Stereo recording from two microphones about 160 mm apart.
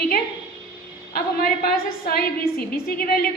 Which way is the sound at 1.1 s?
70° left (ahead or behind).